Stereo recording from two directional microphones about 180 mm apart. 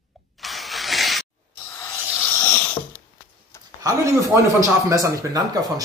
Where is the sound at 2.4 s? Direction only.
10° left (ahead or behind).